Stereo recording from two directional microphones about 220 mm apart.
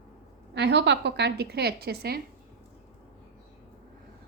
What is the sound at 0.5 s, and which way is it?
A woman's voice, 50° right (ahead or behind).